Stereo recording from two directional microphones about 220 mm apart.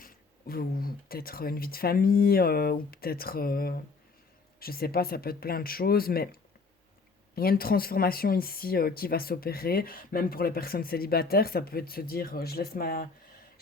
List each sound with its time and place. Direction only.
0.0 s speech: 40° left (ahead or behind)
7.3 s speech: 45° left (ahead or behind)